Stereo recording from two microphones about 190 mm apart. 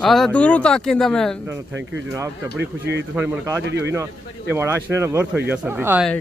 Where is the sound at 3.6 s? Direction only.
70° right (ahead or behind).